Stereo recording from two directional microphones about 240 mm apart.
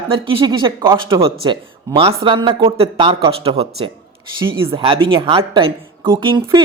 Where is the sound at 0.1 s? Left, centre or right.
Right.